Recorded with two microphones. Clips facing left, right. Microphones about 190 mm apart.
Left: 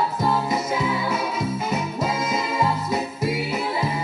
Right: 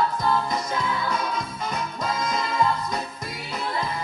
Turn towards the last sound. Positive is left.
turn(degrees=5)  # may be behind; listen again after turning